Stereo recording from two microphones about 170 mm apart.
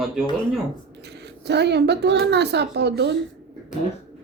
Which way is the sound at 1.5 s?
80° right.